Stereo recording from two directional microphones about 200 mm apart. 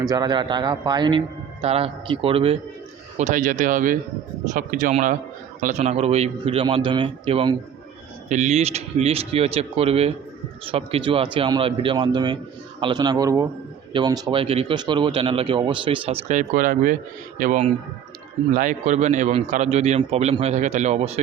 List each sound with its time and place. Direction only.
0.0 s speech: 20° right (ahead or behind)
3.2 s a man's voice: 40° right (ahead or behind)